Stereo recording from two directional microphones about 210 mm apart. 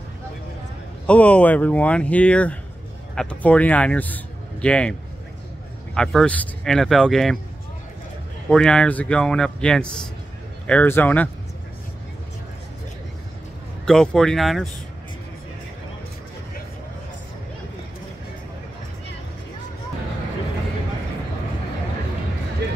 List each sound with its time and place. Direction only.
1.0 s a man's voice: 5° left (ahead or behind)
5.9 s a man's voice: 5° left (ahead or behind)
8.5 s a man's voice: 5° left (ahead or behind)
13.8 s a man's voice: 5° left (ahead or behind)